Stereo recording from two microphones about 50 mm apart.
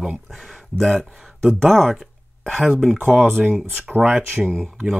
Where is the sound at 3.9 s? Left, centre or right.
Centre.